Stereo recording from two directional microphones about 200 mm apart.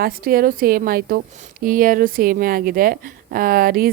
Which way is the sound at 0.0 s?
45° right (ahead or behind).